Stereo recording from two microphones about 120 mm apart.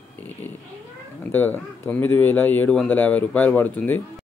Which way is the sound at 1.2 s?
15° left (ahead or behind).